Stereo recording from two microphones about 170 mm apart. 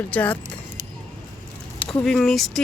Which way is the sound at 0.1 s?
10° left (ahead or behind).